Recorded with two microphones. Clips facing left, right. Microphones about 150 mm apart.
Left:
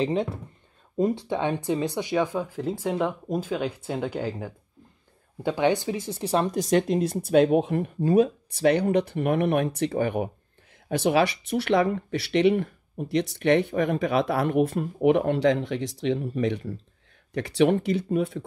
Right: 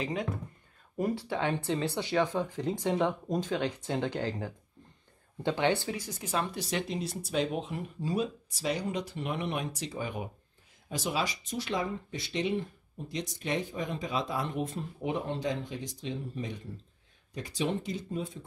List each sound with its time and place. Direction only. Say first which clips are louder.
0.0 s speech: left 8 dB; 30° left (ahead or behind); by 18.4 s 70° left (ahead or behind)